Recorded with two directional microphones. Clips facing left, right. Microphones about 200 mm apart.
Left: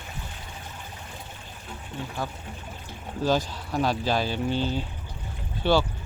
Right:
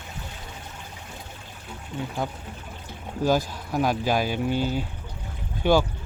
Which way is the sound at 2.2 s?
20° right (ahead or behind).